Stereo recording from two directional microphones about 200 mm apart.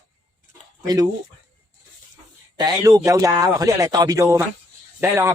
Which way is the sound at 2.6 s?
20° right (ahead or behind).